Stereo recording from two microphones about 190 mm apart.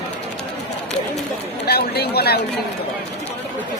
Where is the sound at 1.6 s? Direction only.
55° left (ahead or behind).